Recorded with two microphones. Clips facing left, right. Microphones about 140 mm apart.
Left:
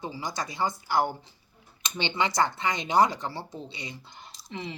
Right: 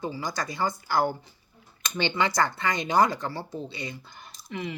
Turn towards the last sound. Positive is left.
turn(degrees=25)  # may be behind; listen again after turning